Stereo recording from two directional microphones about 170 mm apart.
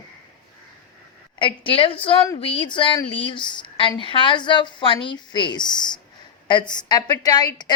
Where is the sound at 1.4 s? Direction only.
30° left (ahead or behind).